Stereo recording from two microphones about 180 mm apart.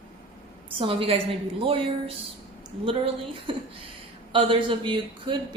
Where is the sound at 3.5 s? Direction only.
30° right (ahead or behind).